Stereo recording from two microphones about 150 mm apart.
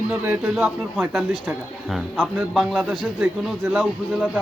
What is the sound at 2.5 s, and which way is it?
Speech, centre (ahead or behind).